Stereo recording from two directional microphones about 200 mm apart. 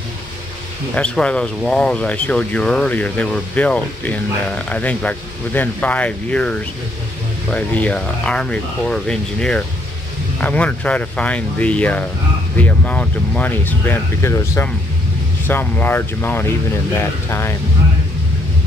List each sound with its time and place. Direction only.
0.9 s speech: 5° left (ahead or behind)